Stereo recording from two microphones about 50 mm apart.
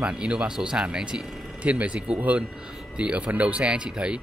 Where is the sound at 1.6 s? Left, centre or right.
Right.